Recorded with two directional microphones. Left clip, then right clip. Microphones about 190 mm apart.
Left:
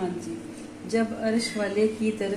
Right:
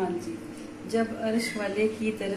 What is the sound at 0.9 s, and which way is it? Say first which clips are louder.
Speech: left 2 dB; 30° left (ahead or behind).